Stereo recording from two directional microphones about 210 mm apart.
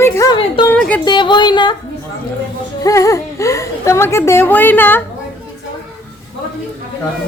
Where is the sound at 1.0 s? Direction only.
20° left (ahead or behind).